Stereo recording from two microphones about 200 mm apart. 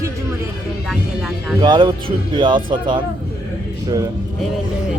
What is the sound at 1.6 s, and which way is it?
Speech, 25° right (ahead or behind).